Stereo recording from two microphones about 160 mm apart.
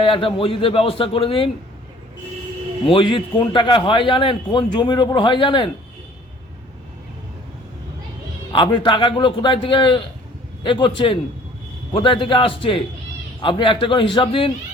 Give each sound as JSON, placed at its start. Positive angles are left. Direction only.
{"t": 0.0, "sound": "a man's voice", "side_deg": 35}
{"t": 2.9, "sound": "a man's voice", "side_deg": 30}
{"t": 8.5, "sound": "a man's voice", "side_deg": 30}